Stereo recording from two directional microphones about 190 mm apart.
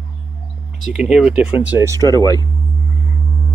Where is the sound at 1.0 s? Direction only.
5° right (ahead or behind).